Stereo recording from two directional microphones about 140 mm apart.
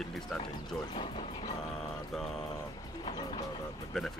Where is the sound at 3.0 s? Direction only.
30° left (ahead or behind).